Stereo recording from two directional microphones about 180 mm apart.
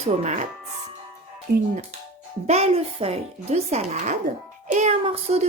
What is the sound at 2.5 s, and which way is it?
Speech, 35° right (ahead or behind).